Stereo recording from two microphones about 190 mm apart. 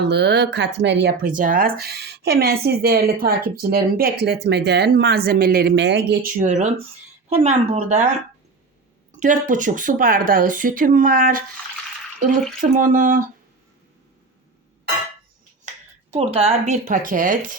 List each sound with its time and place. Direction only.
0.0 s speech: 60° right (ahead or behind); by 8.1 s 40° right (ahead or behind)
9.1 s speech: 40° right (ahead or behind)
12.5 s speech: 45° right (ahead or behind)
16.1 s speech: 35° right (ahead or behind)